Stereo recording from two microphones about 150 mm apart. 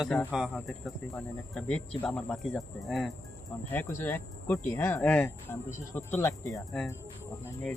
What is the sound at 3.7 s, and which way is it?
Speech, 15° left (ahead or behind).